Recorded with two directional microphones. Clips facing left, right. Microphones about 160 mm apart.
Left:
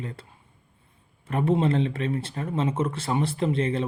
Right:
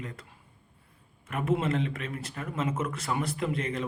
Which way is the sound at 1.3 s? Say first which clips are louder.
Left 5 dB; 30° left (ahead or behind).